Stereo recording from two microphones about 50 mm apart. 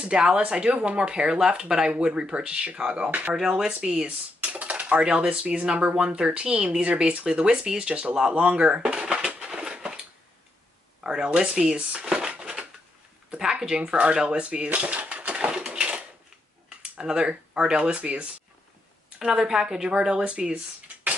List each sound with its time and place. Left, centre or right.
0.0 s speech: centre
3.1 s speech: right
3.3 s speech: centre
4.4 s speech: right
9.3 s a sound: centre
11.1 s speech: centre
11.7 s speech: right
12.1 s a sound: centre
13.4 s speech: centre
15.3 s crushing: centre
17.0 s speech: centre
19.1 s speech: centre